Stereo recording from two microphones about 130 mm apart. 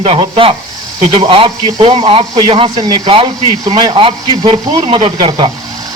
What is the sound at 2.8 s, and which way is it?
A man's voice, 35° right (ahead or behind).